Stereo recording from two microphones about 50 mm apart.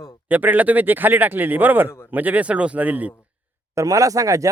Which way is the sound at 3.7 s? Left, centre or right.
Right.